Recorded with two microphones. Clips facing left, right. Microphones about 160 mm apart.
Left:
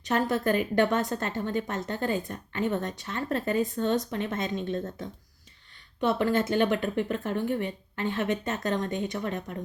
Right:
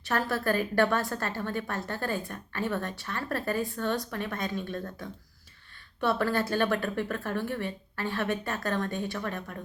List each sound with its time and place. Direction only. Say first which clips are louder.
0.0 s a woman's voice: left 3 dB; 20° left (ahead or behind)